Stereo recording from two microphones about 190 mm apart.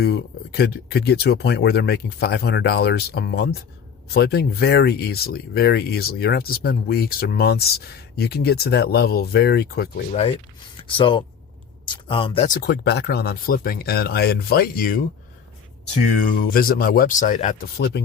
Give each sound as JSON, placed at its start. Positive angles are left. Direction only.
{"t": 0.0, "sound": "speech", "side_deg": 55}
{"t": 10.1, "sound": "speech", "side_deg": 30}
{"t": 12.6, "sound": "speech", "side_deg": 60}
{"t": 16.2, "sound": "speech", "side_deg": 45}
{"t": 17.7, "sound": "speech", "side_deg": 60}